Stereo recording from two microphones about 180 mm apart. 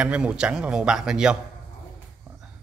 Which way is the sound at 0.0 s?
5° right (ahead or behind).